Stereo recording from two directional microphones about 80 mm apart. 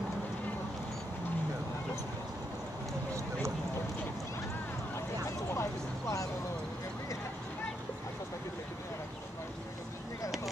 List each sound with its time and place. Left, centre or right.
5.5 s vehicle: left